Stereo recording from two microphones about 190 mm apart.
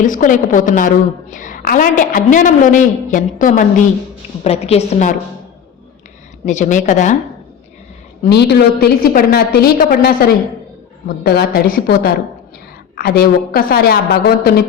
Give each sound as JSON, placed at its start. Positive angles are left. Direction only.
{"t": 0.0, "sound": "a woman's voice", "side_deg": 45}
{"t": 4.4, "sound": "a woman's voice", "side_deg": 30}
{"t": 6.4, "sound": "a woman's voice", "side_deg": 40}
{"t": 8.3, "sound": "a woman's voice", "side_deg": 60}